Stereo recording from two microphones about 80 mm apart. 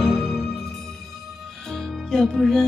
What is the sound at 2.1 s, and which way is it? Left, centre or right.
Music, centre.